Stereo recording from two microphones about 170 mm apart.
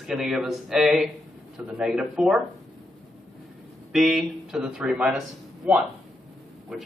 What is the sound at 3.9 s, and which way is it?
A man's voice, centre (ahead or behind).